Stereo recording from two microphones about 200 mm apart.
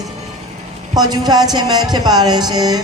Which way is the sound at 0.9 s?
20° right (ahead or behind).